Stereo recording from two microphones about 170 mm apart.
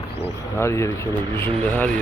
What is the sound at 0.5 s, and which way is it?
Speech, 15° left (ahead or behind).